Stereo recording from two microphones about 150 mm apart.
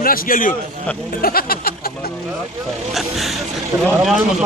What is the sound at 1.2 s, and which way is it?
Speech, 80° left.